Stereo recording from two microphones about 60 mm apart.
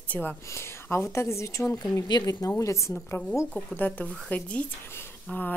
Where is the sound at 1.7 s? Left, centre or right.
Left.